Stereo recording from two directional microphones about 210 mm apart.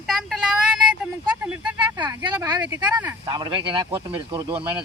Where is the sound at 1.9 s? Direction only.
20° right (ahead or behind).